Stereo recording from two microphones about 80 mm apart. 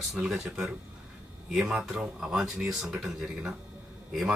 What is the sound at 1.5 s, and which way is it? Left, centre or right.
A man's voice, centre.